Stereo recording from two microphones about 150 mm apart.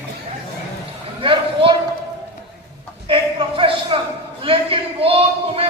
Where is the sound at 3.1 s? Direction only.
35° right (ahead or behind).